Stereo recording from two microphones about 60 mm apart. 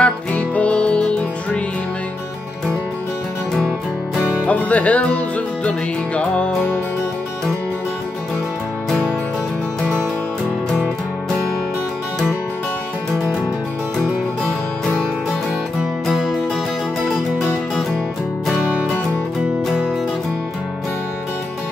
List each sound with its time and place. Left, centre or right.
0.0 s music: left
4.5 s music: left